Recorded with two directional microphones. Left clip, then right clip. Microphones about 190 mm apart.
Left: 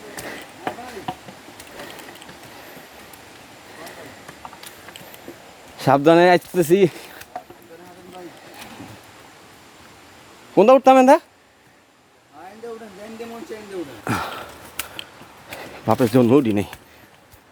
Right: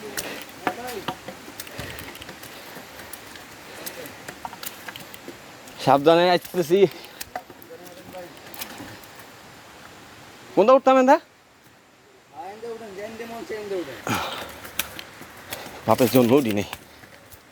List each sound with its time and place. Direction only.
5.8 s speech: 35° left (ahead or behind)
10.5 s speech: 40° left (ahead or behind)
14.0 s a sound: 30° left (ahead or behind)
15.9 s speech: 25° left (ahead or behind)